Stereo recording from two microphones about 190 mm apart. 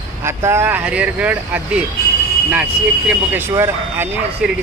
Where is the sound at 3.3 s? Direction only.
15° right (ahead or behind).